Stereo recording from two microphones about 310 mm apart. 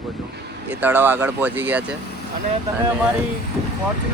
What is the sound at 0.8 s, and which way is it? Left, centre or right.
Speech, centre.